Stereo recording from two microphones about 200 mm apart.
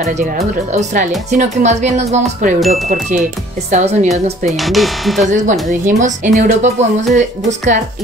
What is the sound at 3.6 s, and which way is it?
Speech, 35° right (ahead or behind).